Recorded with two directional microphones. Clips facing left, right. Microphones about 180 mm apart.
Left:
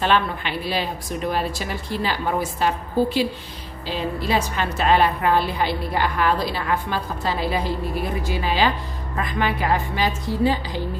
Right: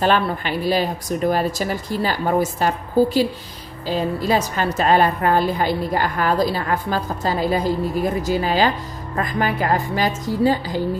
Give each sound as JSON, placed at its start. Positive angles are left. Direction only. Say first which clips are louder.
{"t": 0.0, "sound": "a woman's voice", "louder": "right 2 dB", "side_deg": -45}